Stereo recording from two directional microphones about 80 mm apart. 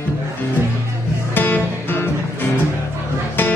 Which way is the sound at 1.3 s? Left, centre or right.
Left.